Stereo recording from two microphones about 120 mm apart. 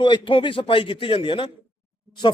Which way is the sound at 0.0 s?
40° left (ahead or behind).